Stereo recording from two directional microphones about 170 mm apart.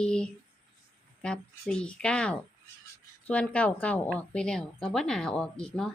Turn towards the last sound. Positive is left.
turn(degrees=5)  # may be behind; listen again after turning